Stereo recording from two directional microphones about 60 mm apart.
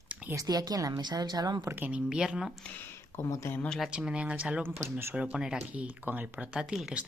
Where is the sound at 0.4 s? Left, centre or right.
Right.